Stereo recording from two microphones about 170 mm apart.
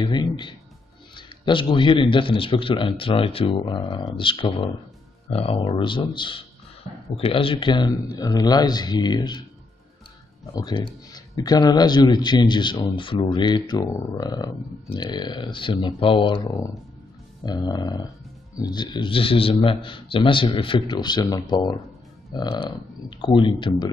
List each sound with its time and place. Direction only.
0.0 s a man's voice: 25° left (ahead or behind)
10.5 s a man's voice: 25° left (ahead or behind)